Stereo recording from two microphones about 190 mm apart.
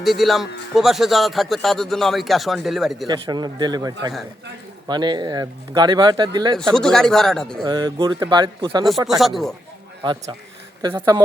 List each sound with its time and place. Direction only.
0.0 s a man's voice: centre (ahead or behind)
3.1 s speech: 20° right (ahead or behind)
6.6 s a man's voice: 5° left (ahead or behind)
7.6 s speech: 20° right (ahead or behind)
9.0 s a man's voice: centre (ahead or behind)
10.0 s speech: 25° right (ahead or behind)